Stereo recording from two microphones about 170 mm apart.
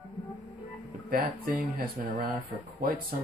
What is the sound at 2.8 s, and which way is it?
Speech, 60° right (ahead or behind).